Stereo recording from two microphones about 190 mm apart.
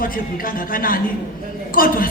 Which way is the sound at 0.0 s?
50° left (ahead or behind).